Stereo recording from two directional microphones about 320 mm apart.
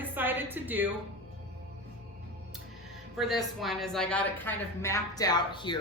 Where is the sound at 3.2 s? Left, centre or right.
Centre.